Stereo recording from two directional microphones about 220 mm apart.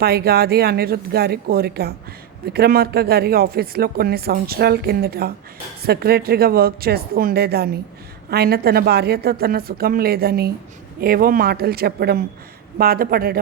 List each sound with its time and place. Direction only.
0.0 s speech: 45° right (ahead or behind)